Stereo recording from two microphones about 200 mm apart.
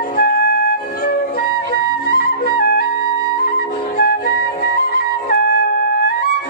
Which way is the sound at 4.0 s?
50° left (ahead or behind).